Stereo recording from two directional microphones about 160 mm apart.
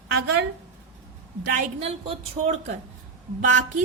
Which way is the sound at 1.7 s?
40° right (ahead or behind).